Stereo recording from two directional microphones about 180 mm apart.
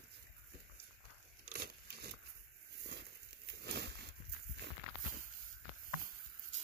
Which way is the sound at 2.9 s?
70° right (ahead or behind).